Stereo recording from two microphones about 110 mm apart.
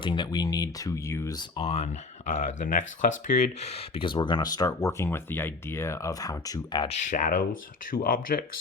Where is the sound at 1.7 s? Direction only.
80° left; by 6.9 s 40° left (ahead or behind).